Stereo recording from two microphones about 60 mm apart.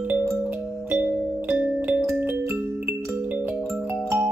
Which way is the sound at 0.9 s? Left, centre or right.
Right.